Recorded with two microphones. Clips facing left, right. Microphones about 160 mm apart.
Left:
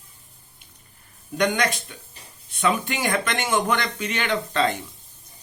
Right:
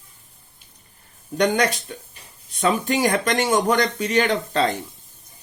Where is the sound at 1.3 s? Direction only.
35° right (ahead or behind).